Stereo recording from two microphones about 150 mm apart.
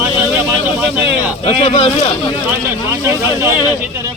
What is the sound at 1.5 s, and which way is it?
Speech, 40° left (ahead or behind).